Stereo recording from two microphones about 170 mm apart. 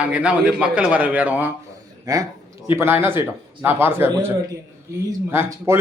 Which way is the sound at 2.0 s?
20° right (ahead or behind).